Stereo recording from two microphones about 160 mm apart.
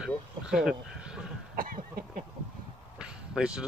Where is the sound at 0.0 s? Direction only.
5° right (ahead or behind).